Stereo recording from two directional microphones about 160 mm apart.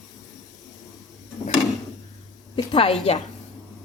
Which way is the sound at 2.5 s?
35° left (ahead or behind).